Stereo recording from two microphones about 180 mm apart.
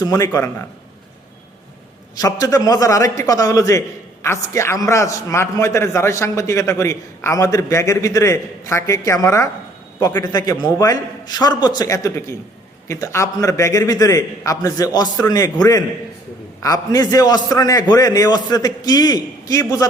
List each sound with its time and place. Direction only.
0.0 s a man's voice: 20° left (ahead or behind)
2.1 s a man's voice: 20° left (ahead or behind)